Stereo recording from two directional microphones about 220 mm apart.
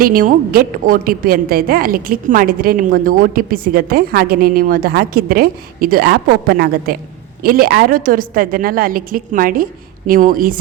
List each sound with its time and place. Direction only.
0.0 s a woman's voice: 40° right (ahead or behind)